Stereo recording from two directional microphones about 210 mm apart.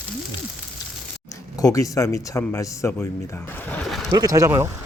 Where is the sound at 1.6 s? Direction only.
15° left (ahead or behind).